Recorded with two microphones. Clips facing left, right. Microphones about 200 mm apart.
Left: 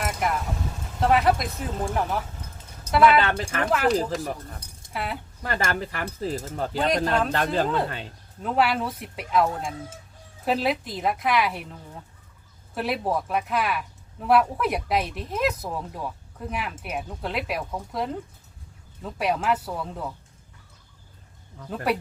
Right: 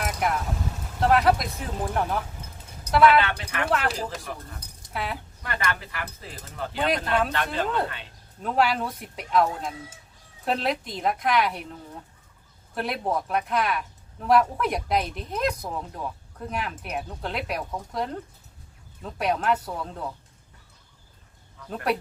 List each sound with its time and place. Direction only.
0.0 s vehicle: centre (ahead or behind)
0.9 s speech: centre (ahead or behind)
3.2 s speech: 40° left (ahead or behind)
3.7 s speech: centre (ahead or behind)
5.4 s speech: 35° left (ahead or behind)
8.4 s speech: 5° left (ahead or behind)